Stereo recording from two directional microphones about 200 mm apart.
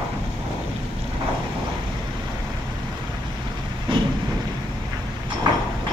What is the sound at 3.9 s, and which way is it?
Vehicle, 25° right (ahead or behind).